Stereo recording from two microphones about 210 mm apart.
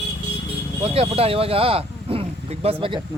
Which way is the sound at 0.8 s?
30° right (ahead or behind).